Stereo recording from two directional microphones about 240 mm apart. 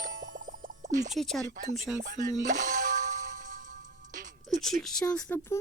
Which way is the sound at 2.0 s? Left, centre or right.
Right.